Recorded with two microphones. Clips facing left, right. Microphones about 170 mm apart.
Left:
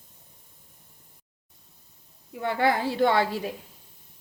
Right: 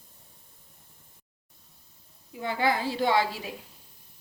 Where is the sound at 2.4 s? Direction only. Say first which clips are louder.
Left 3 dB; 60° left (ahead or behind).